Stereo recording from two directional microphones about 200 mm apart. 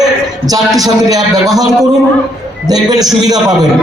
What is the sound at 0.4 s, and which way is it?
A man's voice, 20° right (ahead or behind).